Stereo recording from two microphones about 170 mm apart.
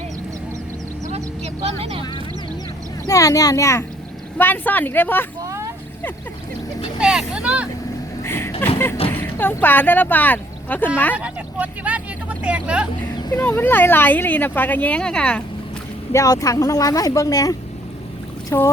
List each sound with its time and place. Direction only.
1.6 s speech: 40° right (ahead or behind)
3.1 s speech: 20° left (ahead or behind)
5.4 s vehicle: 20° right (ahead or behind)
7.0 s speech: 5° right (ahead or behind)
8.2 s vehicle: 15° left (ahead or behind)
9.0 s speech: 10° left (ahead or behind)
11.2 s speech: 10° right (ahead or behind)
13.1 s a sound: 25° left (ahead or behind)
13.4 s speech: 10° left (ahead or behind)
16.1 s speech: 20° left (ahead or behind)
18.4 s a sound: 15° left (ahead or behind)